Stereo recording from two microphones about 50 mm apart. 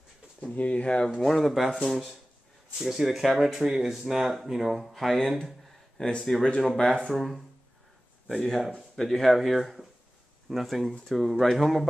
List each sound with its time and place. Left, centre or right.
0.4 s speech: left
1.2 s speech: centre
5.9 s speech: centre